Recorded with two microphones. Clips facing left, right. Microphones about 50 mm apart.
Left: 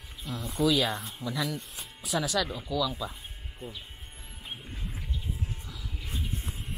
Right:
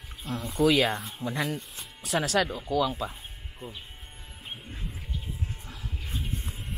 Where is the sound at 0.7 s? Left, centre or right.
Right.